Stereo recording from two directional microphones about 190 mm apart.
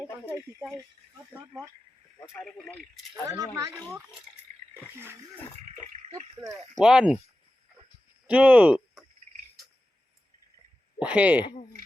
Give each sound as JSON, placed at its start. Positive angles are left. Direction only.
{"t": 0.0, "sound": "speech", "side_deg": -5}
{"t": 2.6, "sound": "speech", "side_deg": 0}
{"t": 3.2, "sound": "speech", "side_deg": -15}
{"t": 6.7, "sound": "speech", "side_deg": -5}
{"t": 8.3, "sound": "speech", "side_deg": -5}
{"t": 11.0, "sound": "speech", "side_deg": -5}